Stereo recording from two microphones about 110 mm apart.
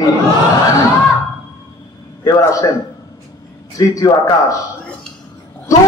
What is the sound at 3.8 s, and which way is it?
Speech, 35° left (ahead or behind).